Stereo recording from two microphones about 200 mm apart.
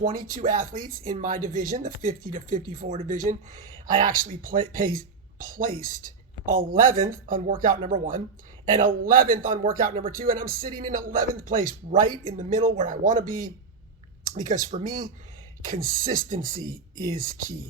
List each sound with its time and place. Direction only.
0.3 s speech: 45° right (ahead or behind)